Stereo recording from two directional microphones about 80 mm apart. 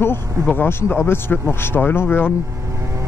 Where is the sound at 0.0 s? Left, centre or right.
Left.